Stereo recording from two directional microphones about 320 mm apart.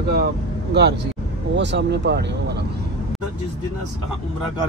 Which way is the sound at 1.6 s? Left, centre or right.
Right.